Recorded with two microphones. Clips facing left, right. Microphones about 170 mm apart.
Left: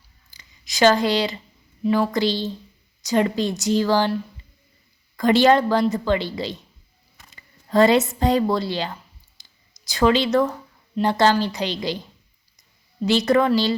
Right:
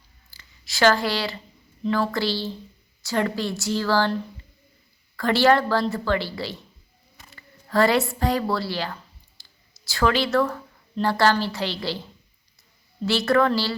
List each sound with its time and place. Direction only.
0.3 s a sound: 20° left (ahead or behind)
1.8 s speech: 15° left (ahead or behind)
5.1 s a woman's voice: 20° left (ahead or behind)
13.1 s speech: 20° left (ahead or behind)